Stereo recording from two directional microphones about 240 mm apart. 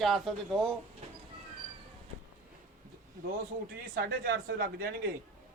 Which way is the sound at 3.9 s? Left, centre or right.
Right.